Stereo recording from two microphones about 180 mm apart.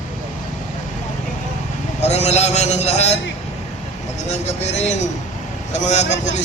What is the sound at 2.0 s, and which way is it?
A man's voice, 40° left (ahead or behind).